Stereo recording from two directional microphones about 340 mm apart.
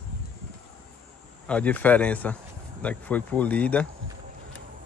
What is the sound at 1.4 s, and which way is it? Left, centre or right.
Speech, centre.